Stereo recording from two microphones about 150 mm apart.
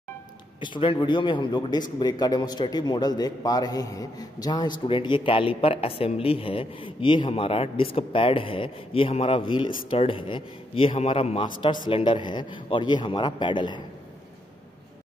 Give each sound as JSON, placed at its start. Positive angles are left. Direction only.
{"t": 0.6, "sound": "a man's voice", "side_deg": 35}